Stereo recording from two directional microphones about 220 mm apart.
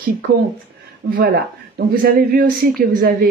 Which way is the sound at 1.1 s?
45° right (ahead or behind).